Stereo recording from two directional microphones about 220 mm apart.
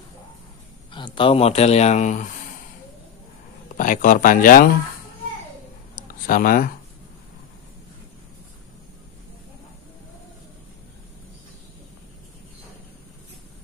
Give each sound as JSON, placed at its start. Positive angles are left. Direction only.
{"t": 0.9, "sound": "speech", "side_deg": 20}
{"t": 3.6, "sound": "speech", "side_deg": 35}
{"t": 6.2, "sound": "speech", "side_deg": 40}